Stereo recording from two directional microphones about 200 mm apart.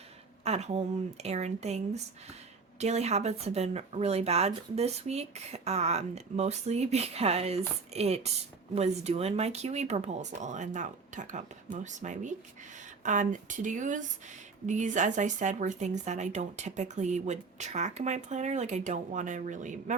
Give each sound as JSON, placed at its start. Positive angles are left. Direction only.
{"t": 0.4, "sound": "a woman's voice", "side_deg": -30}